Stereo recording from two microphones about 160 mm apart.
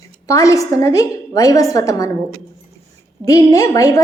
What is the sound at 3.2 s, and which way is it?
Speech, 20° left (ahead or behind).